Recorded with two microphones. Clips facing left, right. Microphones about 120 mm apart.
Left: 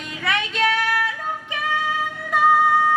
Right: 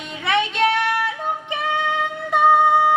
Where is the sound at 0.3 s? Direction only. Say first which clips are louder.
Right 3 dB; 25° right (ahead or behind).